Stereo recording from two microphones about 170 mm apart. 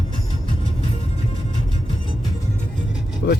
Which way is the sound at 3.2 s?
90° left.